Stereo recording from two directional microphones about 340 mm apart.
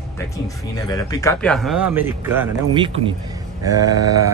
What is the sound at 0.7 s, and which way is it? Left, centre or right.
Speech, centre.